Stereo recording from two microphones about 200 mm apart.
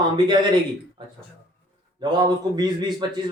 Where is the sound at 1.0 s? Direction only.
25° right (ahead or behind).